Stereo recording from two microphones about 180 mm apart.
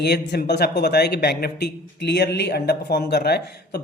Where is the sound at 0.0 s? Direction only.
65° left (ahead or behind).